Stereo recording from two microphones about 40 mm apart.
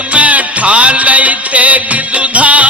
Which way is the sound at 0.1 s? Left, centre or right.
Right.